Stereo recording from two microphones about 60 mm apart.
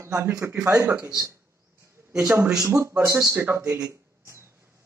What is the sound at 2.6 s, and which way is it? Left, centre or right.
Speech, right.